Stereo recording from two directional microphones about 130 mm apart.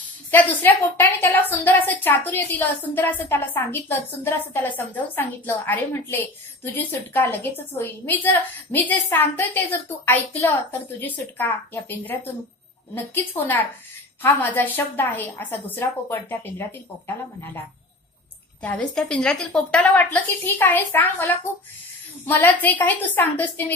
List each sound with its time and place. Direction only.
0.0 s a woman's voice: 15° left (ahead or behind)
18.6 s a woman's voice: 10° left (ahead or behind)